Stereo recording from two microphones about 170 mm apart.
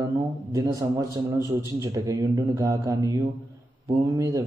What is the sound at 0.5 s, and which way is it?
Speech, 20° right (ahead or behind).